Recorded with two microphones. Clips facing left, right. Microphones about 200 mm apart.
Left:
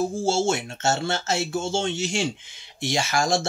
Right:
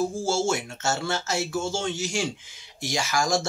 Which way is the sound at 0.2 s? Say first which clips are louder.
Left 2 dB; 25° left (ahead or behind).